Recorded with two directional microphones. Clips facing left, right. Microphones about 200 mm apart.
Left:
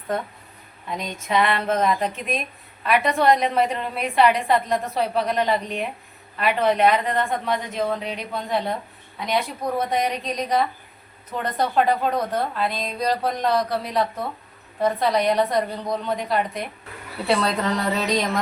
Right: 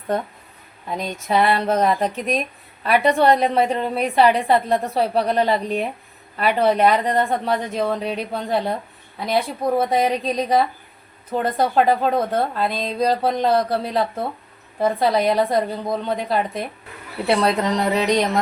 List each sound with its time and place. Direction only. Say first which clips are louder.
0.9 s a woman's voice: right 3 dB; 35° right (ahead or behind); by 18.3 s 20° right (ahead or behind)